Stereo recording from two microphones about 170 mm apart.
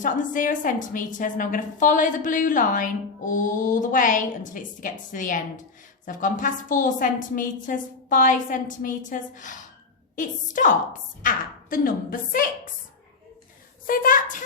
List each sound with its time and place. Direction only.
0.0 s a woman's voice: 50° left (ahead or behind)
13.8 s a woman's voice: 55° left (ahead or behind)